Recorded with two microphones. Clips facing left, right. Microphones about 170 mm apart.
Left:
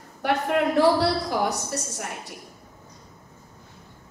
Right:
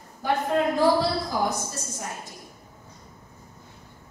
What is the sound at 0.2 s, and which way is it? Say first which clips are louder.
A woman's voice: left 1 dB; 70° left (ahead or behind).